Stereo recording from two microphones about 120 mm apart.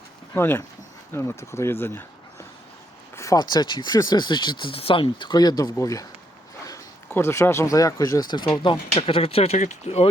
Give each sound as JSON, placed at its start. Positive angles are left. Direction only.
{"t": 0.3, "sound": "speech", "side_deg": 20}
{"t": 3.3, "sound": "speech", "side_deg": 35}
{"t": 7.1, "sound": "speech", "side_deg": 20}
{"t": 9.0, "sound": "speech", "side_deg": 50}